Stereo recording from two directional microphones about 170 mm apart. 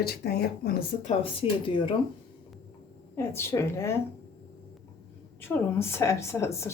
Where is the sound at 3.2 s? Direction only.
15° left (ahead or behind).